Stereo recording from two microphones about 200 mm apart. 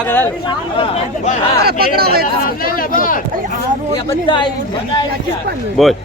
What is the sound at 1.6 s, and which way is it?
Speech, 50° right (ahead or behind).